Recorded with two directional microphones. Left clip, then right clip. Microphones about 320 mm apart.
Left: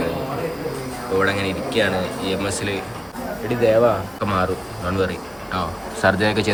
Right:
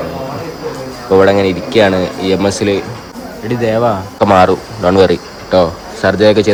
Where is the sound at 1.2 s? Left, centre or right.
Centre.